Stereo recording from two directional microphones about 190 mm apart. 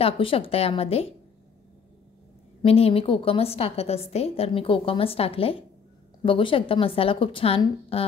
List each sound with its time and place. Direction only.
0.0 s a woman's voice: 30° left (ahead or behind)
2.6 s a woman's voice: 30° left (ahead or behind)